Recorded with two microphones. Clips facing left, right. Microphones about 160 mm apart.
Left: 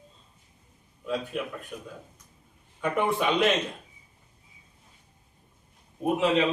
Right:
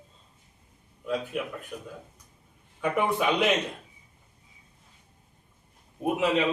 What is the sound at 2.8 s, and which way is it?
Speech, 5° right (ahead or behind).